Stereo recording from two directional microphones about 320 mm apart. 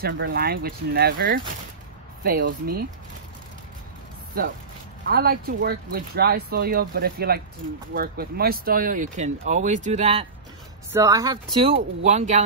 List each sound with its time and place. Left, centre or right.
0.0 s speech: right
5.0 s speech: right
10.9 s speech: centre